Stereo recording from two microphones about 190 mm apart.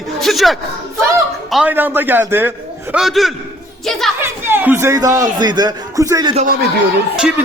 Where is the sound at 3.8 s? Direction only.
Centre (ahead or behind).